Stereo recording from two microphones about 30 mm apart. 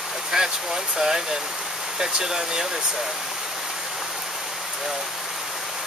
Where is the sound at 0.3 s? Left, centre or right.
Centre.